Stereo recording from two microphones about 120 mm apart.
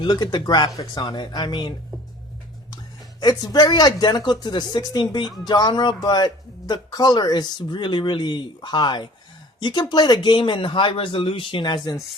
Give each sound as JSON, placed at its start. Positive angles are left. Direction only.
{"t": 0.0, "sound": "speech", "side_deg": 35}
{"t": 3.2, "sound": "speech", "side_deg": 35}